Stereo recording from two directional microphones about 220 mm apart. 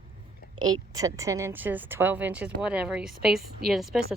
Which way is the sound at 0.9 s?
15° right (ahead or behind).